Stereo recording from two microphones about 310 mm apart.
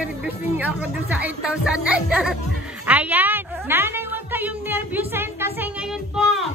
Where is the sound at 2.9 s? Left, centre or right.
Centre.